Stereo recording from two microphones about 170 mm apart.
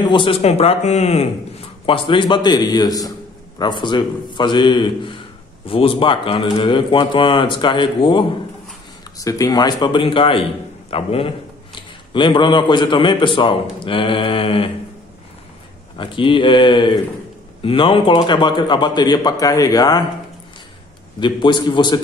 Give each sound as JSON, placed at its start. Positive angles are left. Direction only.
{"t": 0.0, "sound": "a man's voice", "side_deg": 30}
{"t": 16.0, "sound": "speech", "side_deg": 30}
{"t": 21.2, "sound": "speech", "side_deg": 25}